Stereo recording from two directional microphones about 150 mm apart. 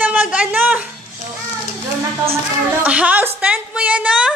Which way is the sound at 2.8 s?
10° right (ahead or behind).